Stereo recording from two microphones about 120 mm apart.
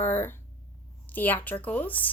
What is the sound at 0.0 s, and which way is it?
Speech, 15° left (ahead or behind).